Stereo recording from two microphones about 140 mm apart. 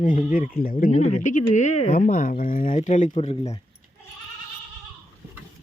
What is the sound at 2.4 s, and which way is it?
Speech, 70° left (ahead or behind).